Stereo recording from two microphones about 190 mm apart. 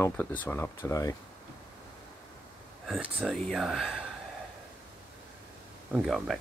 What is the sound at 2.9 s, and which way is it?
Speech, 5° right (ahead or behind).